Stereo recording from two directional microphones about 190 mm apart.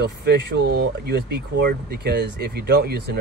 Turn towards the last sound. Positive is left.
turn(degrees=-55)  # may be behind; listen again after turning